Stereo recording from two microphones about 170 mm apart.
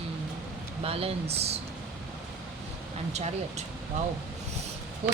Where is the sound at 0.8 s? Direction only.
35° right (ahead or behind).